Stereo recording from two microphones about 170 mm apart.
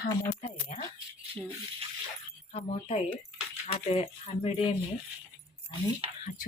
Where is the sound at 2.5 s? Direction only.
40° left (ahead or behind).